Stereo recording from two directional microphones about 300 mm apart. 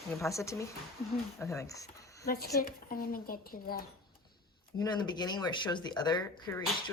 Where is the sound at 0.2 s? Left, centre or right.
Centre.